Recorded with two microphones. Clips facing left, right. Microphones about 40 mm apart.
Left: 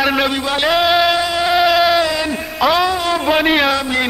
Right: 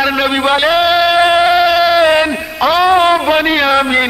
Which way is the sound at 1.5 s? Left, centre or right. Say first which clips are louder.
Right 3 dB; centre.